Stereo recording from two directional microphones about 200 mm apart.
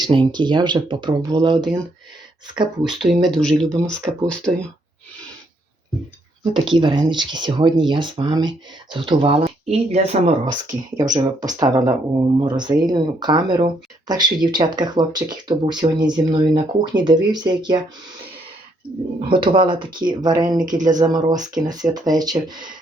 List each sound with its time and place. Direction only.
0.0 s speech: 25° right (ahead or behind)
3.0 s speech: centre (ahead or behind)
6.4 s speech: 25° right (ahead or behind)
11.1 s speech: 20° right (ahead or behind)
19.5 s speech: 25° right (ahead or behind)